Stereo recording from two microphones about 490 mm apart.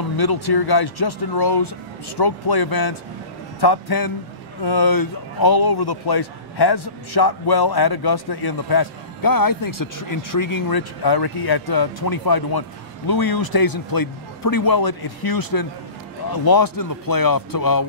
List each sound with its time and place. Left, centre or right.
0.2 s a man's voice: left